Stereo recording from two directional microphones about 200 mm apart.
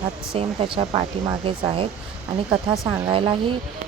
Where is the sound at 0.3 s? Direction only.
25° right (ahead or behind).